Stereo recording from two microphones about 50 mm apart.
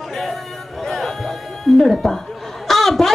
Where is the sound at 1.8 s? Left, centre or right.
Centre.